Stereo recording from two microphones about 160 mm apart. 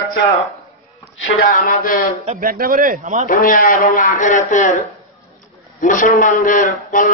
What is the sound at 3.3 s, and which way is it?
Speech, 55° left (ahead or behind).